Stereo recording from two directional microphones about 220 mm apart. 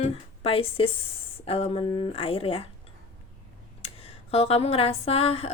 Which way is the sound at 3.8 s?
25° left (ahead or behind).